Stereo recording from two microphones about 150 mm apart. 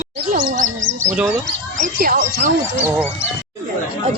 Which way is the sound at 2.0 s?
70° right (ahead or behind).